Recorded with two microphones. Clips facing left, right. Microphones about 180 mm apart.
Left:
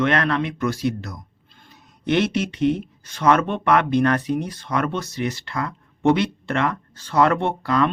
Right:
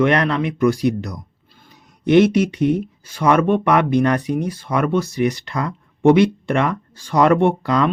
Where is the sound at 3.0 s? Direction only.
10° right (ahead or behind).